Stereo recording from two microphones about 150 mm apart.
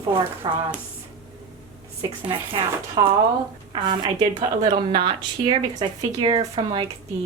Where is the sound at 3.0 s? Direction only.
30° right (ahead or behind).